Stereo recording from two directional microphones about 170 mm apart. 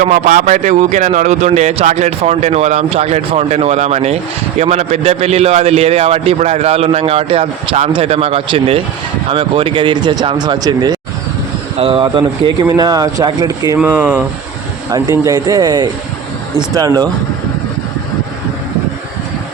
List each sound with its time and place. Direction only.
0.0 s a man's voice: 45° right (ahead or behind); by 13.7 s 20° right (ahead or behind)
13.7 s speech: 10° right (ahead or behind)
14.8 s speech: 20° right (ahead or behind)